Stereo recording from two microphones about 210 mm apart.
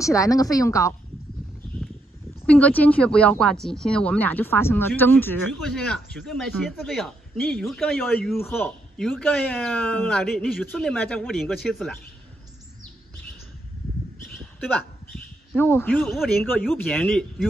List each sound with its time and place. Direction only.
0.0 s a woman's voice: 15° left (ahead or behind)
2.4 s speech: 5° left (ahead or behind)
14.7 s speech: 5° left (ahead or behind)